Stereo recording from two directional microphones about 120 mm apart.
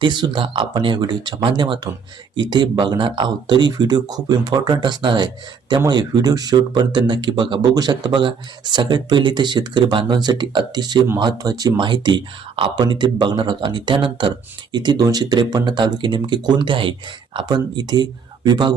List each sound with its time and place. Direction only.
0.0 s speech: 40° right (ahead or behind)